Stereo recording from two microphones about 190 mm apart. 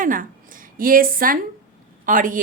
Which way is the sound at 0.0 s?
45° right (ahead or behind).